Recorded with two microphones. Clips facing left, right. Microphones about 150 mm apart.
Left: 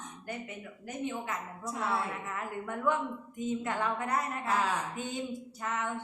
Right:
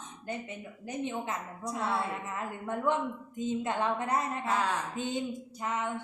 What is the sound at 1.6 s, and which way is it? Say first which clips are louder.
Speech: right 1 dB; centre (ahead or behind).